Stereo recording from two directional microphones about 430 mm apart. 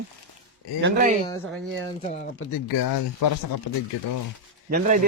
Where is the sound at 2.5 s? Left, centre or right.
Left.